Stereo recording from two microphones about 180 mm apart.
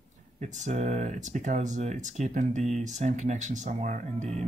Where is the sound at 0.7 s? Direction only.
40° right (ahead or behind).